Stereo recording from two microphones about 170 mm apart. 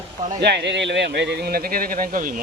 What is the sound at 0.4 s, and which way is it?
Speech, 85° right.